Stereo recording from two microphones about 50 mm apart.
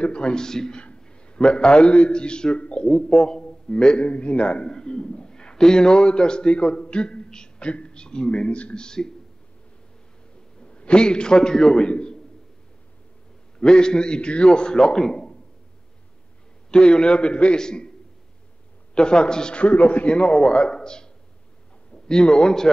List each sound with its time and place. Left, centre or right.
0.0 s a man's voice: centre
10.6 s a man's voice: left
13.6 s a man's voice: centre
16.7 s a man's voice: centre
18.9 s a man's voice: centre